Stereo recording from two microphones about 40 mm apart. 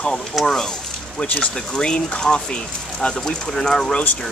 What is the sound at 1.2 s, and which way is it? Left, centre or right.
Speech, left.